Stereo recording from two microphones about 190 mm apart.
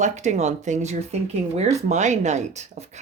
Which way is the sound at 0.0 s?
40° right (ahead or behind).